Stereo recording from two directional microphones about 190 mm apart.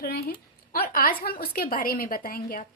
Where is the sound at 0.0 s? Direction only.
55° left (ahead or behind).